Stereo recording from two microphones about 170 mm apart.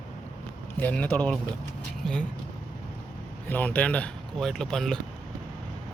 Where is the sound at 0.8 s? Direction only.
10° left (ahead or behind).